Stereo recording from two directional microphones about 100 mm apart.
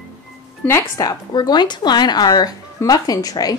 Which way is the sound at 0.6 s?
25° left (ahead or behind).